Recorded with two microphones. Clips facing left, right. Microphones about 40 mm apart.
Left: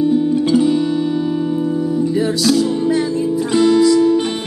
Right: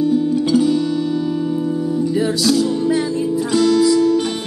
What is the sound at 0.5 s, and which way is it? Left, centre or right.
Music, left.